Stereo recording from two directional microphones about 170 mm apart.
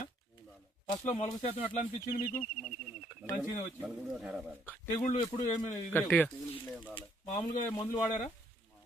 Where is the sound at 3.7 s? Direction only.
Centre (ahead or behind).